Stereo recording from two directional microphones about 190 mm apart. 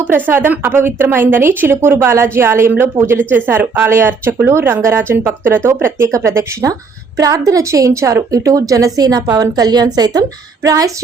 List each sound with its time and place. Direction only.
0.0 s a woman's voice: 10° right (ahead or behind)